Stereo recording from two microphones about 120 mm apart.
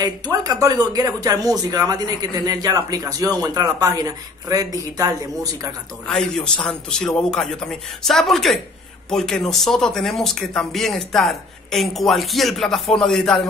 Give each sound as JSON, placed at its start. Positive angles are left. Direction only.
{"t": 0.0, "sound": "speech", "side_deg": -30}
{"t": 6.0, "sound": "speech", "side_deg": 5}